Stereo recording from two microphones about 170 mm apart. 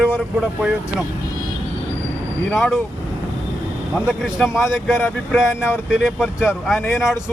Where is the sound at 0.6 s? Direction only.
5° right (ahead or behind).